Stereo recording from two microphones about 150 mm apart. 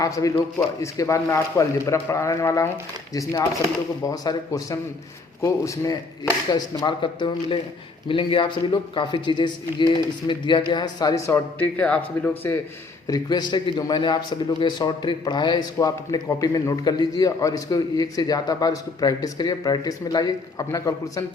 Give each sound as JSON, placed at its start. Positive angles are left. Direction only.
{"t": 0.0, "sound": "a man's voice", "side_deg": 20}
{"t": 4.0, "sound": "a man's voice", "side_deg": 25}
{"t": 11.6, "sound": "speech", "side_deg": 10}
{"t": 13.1, "sound": "a man's voice", "side_deg": 25}